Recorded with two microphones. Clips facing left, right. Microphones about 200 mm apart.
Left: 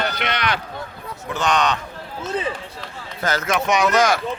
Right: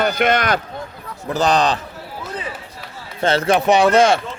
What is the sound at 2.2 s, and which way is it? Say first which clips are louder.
Run: left 5 dB; 25° left (ahead or behind).